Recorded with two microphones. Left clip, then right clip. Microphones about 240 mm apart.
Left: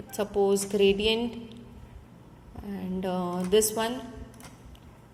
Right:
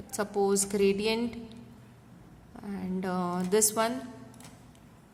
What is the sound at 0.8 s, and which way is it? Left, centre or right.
Speech, right.